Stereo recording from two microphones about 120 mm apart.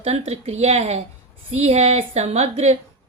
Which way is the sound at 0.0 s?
60° right (ahead or behind).